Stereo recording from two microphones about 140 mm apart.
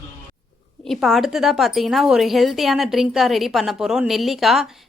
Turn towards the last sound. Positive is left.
turn(degrees=0)  # may be behind; listen again after turning